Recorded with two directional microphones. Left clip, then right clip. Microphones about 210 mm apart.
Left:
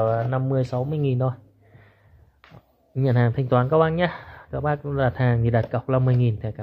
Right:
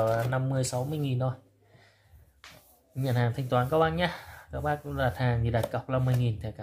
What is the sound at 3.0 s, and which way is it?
Speech, 35° left (ahead or behind).